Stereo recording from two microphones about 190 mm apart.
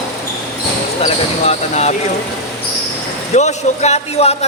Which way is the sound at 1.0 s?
35° left (ahead or behind).